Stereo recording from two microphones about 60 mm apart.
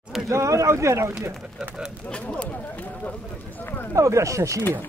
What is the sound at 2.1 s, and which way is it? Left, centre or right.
Speech, centre.